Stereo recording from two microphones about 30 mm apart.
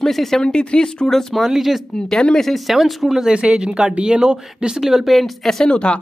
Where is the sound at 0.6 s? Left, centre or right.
Left.